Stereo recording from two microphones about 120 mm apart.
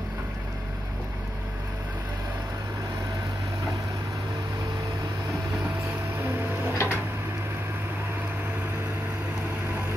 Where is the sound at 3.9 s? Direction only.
25° right (ahead or behind).